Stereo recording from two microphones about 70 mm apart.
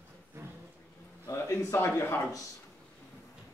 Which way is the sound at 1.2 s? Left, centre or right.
Left.